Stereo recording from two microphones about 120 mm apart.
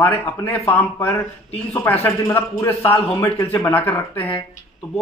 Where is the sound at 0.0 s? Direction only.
15° left (ahead or behind).